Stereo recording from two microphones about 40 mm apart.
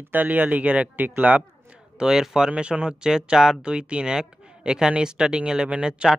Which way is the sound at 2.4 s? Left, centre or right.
Right.